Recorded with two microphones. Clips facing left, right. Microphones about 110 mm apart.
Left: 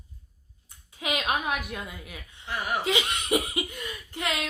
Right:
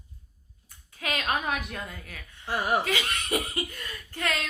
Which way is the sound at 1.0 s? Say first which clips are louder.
Left 1 dB; 15° left (ahead or behind).